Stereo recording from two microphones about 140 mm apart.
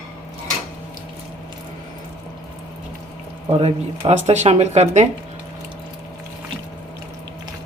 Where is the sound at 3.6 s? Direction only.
50° right (ahead or behind).